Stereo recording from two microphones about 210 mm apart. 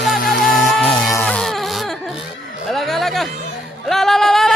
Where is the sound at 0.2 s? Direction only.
45° left (ahead or behind).